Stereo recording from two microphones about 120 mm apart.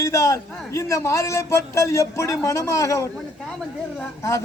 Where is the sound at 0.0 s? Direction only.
25° left (ahead or behind).